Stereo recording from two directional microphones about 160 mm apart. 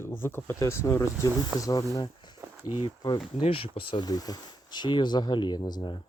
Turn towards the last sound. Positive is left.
turn(degrees=30)  # may be behind; listen again after turning